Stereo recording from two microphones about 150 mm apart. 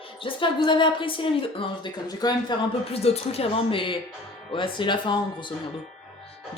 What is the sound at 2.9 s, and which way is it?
Speech, 45° left (ahead or behind).